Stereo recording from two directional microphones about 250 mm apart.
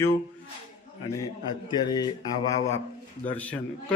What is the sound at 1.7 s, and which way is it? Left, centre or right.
A man's voice, centre.